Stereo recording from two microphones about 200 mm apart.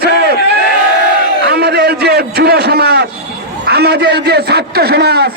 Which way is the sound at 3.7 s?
55° right (ahead or behind).